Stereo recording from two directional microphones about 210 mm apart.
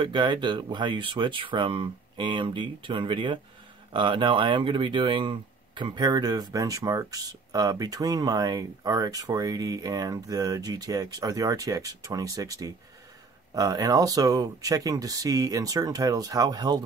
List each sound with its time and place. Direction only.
0.0 s speech: 20° right (ahead or behind)